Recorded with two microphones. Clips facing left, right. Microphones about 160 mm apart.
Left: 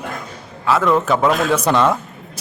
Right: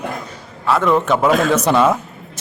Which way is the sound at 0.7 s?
Centre (ahead or behind).